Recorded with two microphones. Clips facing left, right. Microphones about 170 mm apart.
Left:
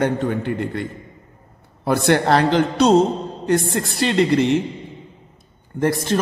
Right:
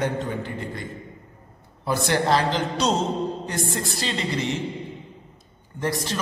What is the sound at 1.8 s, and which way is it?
A man's voice, 60° left (ahead or behind).